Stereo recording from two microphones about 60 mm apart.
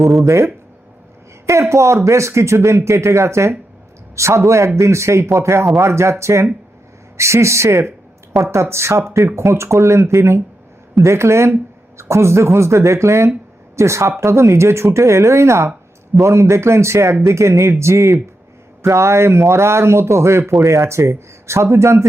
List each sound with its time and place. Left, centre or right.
0.0 s speech: centre
0.3 s speech: right
1.7 s speech: right